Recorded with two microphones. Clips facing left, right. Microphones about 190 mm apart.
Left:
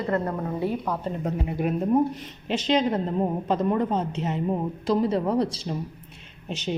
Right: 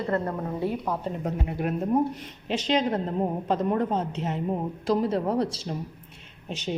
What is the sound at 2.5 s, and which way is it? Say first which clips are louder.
A woman's voice: left 2 dB; 5° right (ahead or behind).